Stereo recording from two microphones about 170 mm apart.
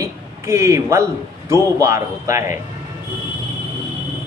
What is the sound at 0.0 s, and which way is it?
A man's voice, 15° right (ahead or behind).